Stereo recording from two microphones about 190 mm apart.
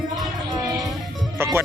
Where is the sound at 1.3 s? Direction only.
10° right (ahead or behind).